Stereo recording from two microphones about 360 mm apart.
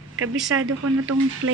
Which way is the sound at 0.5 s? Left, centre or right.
Right.